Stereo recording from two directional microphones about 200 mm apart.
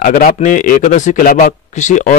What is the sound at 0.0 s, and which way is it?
Speech, 45° left (ahead or behind).